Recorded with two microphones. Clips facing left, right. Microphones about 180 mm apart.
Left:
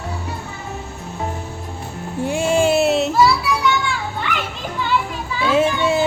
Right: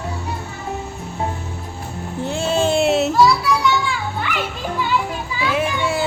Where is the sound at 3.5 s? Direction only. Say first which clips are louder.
Right 2 dB; centre (ahead or behind).